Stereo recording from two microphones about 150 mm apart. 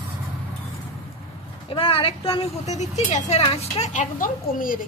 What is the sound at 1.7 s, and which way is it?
Speech, 35° left (ahead or behind).